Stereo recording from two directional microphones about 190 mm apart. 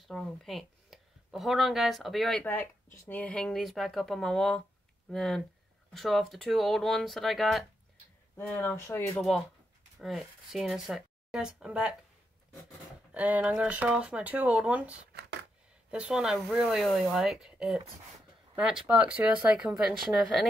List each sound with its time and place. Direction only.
0.1 s speech: centre (ahead or behind)
9.9 s speech: centre (ahead or behind)
13.1 s speech: 5° right (ahead or behind)
15.1 s a sound: 65° right (ahead or behind)
15.9 s speech: 5° right (ahead or behind)